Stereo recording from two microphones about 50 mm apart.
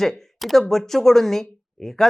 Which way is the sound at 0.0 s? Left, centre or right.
Centre.